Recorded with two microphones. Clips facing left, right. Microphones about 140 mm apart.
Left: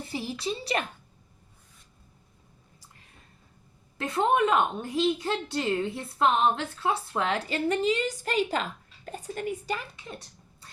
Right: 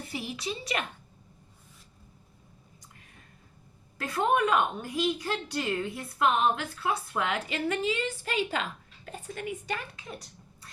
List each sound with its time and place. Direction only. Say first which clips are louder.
0.1 s a child's voice: left 3 dB; 30° left (ahead or behind)
3.9 s a woman's voice: left 2 dB; 25° left (ahead or behind)